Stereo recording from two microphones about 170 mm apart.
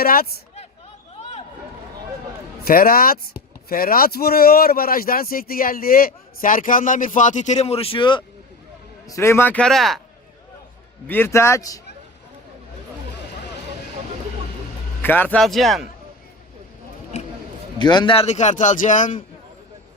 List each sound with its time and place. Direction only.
0.0 s speech: 60° left (ahead or behind)
1.1 s a sound: 35° left (ahead or behind)
2.6 s speech: 60° left (ahead or behind); by 8.2 s 30° left (ahead or behind)
9.0 s a man's voice: 15° left (ahead or behind)
11.1 s a man's voice: 15° left (ahead or behind)
15.0 s speech: 10° left (ahead or behind)
17.1 s a sound: 40° left (ahead or behind)
17.7 s a man's voice: 25° left (ahead or behind); by 19.2 s 50° left (ahead or behind)